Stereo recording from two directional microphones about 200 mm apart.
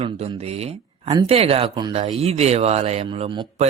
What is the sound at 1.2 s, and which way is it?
Speech, 30° right (ahead or behind).